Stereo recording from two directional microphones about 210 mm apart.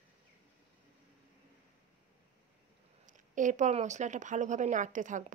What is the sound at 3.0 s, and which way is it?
Speech, 35° right (ahead or behind).